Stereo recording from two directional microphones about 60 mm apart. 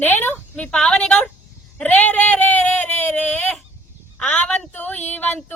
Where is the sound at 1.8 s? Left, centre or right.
Left.